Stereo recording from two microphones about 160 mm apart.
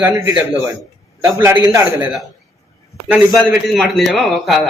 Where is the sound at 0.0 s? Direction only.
10° right (ahead or behind).